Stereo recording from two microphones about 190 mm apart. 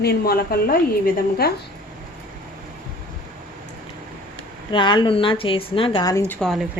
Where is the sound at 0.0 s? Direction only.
55° left (ahead or behind).